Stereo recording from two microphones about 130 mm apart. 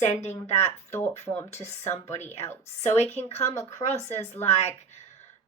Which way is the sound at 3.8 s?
60° left (ahead or behind).